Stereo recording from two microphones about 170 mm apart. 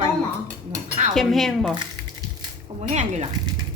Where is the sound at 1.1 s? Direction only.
Centre (ahead or behind).